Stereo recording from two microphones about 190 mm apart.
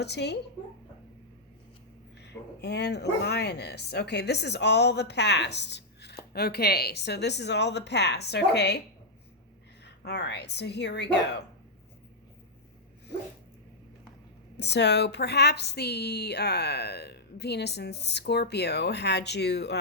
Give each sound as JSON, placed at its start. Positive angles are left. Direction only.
{"t": 0.0, "sound": "speech", "side_deg": 60}
{"t": 2.1, "sound": "speech", "side_deg": 60}
{"t": 9.8, "sound": "speech", "side_deg": 60}
{"t": 14.5, "sound": "speech", "side_deg": 60}